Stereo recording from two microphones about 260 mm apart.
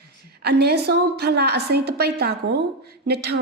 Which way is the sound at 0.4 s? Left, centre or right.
Right.